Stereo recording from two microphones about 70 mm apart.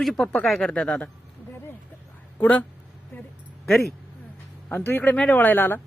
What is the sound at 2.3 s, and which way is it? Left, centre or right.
Speech, left.